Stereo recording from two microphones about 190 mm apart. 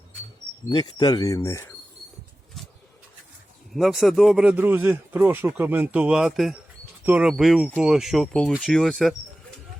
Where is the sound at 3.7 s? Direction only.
Centre (ahead or behind).